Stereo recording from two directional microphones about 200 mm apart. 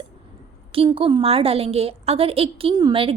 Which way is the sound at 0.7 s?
25° right (ahead or behind).